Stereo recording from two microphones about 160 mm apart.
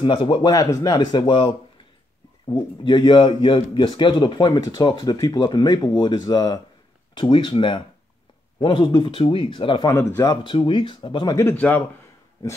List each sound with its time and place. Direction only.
0.0 s speech: 30° left (ahead or behind)
9.8 s speech: 15° left (ahead or behind)
11.3 s speech: 10° left (ahead or behind)